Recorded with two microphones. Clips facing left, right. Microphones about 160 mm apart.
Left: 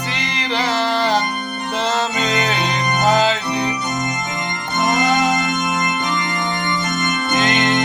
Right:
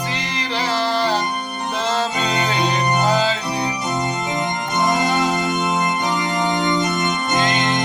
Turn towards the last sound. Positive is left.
turn(degrees=70)  # may be behind; listen again after turning